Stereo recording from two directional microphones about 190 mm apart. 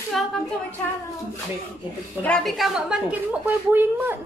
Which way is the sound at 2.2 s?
5° left (ahead or behind).